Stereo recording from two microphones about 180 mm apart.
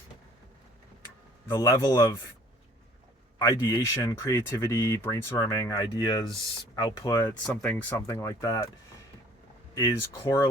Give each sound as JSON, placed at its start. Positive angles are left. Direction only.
{"t": 1.5, "sound": "speech", "side_deg": 20}
{"t": 3.3, "sound": "speech", "side_deg": 20}
{"t": 9.7, "sound": "speech", "side_deg": 20}